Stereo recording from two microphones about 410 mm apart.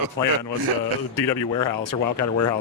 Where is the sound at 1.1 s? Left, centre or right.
Left.